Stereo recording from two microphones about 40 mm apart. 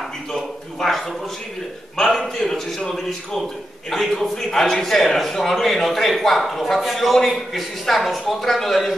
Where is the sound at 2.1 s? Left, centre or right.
Centre.